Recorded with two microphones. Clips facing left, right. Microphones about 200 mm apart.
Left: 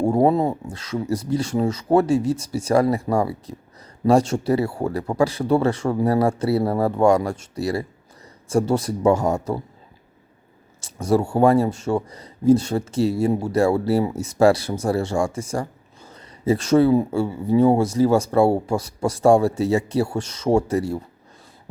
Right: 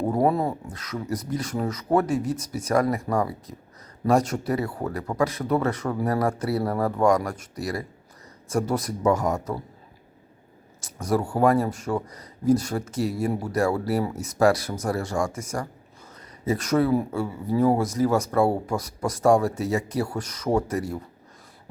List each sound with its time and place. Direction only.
0.0 s speech: 25° left (ahead or behind)
10.8 s speech: 25° left (ahead or behind)